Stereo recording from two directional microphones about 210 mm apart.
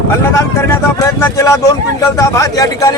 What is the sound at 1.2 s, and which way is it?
Speech, 15° left (ahead or behind).